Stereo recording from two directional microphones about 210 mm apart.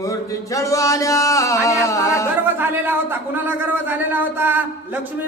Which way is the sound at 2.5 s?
10° right (ahead or behind).